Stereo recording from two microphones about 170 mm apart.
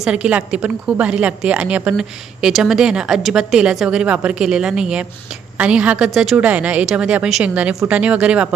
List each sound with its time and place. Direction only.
0.0 s a woman's voice: 5° right (ahead or behind)